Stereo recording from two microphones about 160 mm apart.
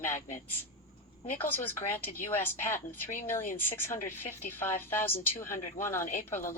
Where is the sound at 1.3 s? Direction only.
10° left (ahead or behind).